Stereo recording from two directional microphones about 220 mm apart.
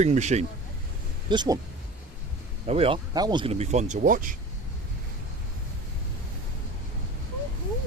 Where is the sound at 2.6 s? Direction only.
25° right (ahead or behind).